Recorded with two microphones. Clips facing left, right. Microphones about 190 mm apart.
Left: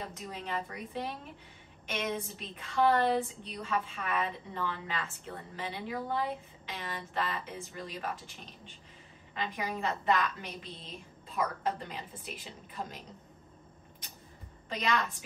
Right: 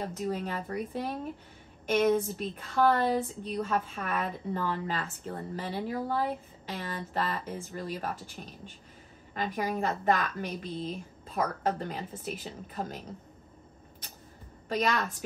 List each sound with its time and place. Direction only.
0.0 s a woman's voice: 45° right (ahead or behind)
9.3 s a woman's voice: 45° right (ahead or behind)